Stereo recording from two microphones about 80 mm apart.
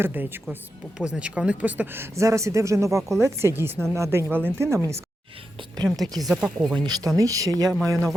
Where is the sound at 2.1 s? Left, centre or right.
Right.